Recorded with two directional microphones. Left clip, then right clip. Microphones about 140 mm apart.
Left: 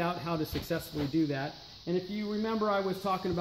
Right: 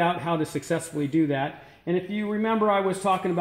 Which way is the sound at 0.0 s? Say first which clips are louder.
Right 8 dB; 35° right (ahead or behind).